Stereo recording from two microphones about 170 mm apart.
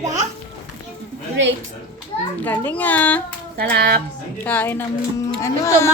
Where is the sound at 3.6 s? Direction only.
65° right (ahead or behind).